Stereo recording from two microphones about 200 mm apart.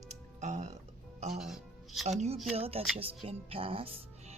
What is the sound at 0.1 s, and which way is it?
Music, 35° right (ahead or behind).